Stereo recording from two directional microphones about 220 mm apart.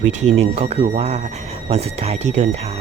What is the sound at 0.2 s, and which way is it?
Speech, 30° right (ahead or behind).